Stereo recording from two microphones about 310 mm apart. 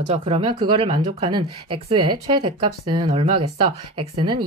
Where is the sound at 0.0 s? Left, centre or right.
Centre.